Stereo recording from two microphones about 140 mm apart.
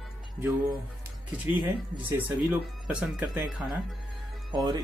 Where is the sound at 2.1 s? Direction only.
15° right (ahead or behind).